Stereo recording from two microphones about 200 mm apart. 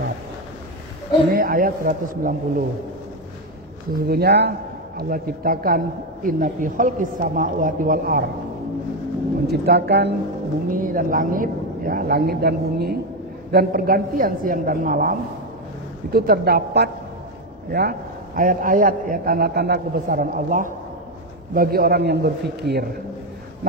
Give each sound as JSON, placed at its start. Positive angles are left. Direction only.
{"t": 1.3, "sound": "a man's voice", "side_deg": -45}
{"t": 3.9, "sound": "a man's voice", "side_deg": -50}
{"t": 9.5, "sound": "a man's voice", "side_deg": -55}
{"t": 10.7, "sound": "a man's voice", "side_deg": -45}